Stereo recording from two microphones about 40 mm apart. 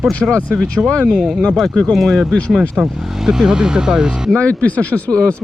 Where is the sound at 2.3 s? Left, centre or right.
Left.